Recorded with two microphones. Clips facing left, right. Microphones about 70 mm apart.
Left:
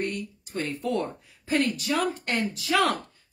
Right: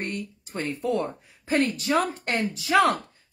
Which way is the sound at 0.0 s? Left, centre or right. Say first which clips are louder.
Left 1 dB; right.